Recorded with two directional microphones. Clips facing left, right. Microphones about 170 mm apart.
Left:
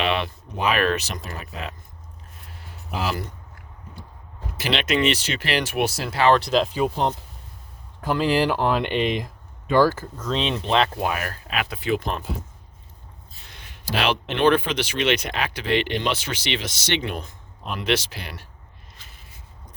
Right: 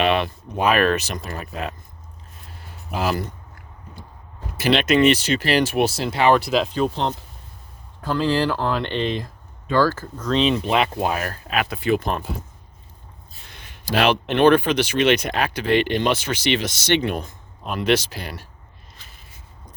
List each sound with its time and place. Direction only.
0.0 s speech: 50° right (ahead or behind)
3.0 s speech: 45° right (ahead or behind)
4.6 s speech: 45° right (ahead or behind); by 6.7 s 5° right (ahead or behind)
6.7 s speech: 10° left (ahead or behind)
10.2 s speech: centre (ahead or behind)
10.9 s speech: 30° right (ahead or behind); by 12.3 s 50° right (ahead or behind)
13.4 s speech: 55° right (ahead or behind)